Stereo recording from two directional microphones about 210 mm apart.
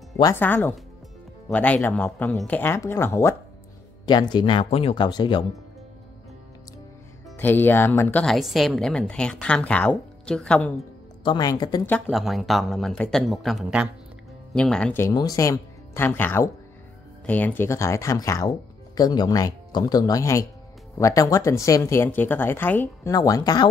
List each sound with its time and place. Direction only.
0.2 s speech: 10° left (ahead or behind)
7.3 s speech: 10° left (ahead or behind)
11.2 s speech: 20° left (ahead or behind)
12.1 s speech: centre (ahead or behind); by 23.7 s 20° left (ahead or behind)